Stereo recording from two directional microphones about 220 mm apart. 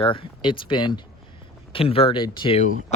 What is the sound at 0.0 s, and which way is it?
Speech, 25° left (ahead or behind).